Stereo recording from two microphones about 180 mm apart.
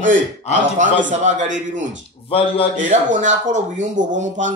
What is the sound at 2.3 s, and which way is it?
Speech, 30° left (ahead or behind).